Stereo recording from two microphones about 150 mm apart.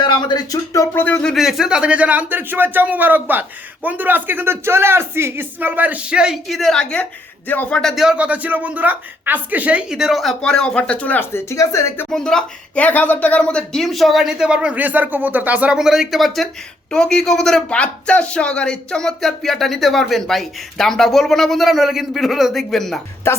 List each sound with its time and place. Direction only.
0.0 s speech: 30° left (ahead or behind)
12.1 s speech: 5° left (ahead or behind)
23.3 s speech: 15° left (ahead or behind)